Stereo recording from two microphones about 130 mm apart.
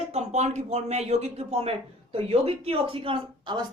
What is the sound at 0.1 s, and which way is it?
A woman's voice, 60° right (ahead or behind).